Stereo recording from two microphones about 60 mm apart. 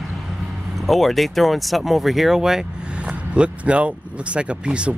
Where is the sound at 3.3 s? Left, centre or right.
Centre.